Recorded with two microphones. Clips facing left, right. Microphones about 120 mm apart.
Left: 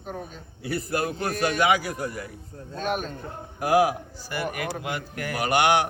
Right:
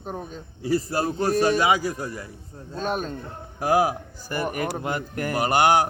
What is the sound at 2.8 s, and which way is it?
A man's voice, 30° right (ahead or behind).